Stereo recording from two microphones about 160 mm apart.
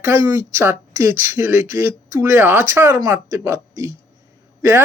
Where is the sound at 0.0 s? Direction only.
15° right (ahead or behind).